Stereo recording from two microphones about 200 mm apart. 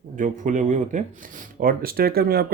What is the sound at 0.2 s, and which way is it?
Speech, 40° right (ahead or behind).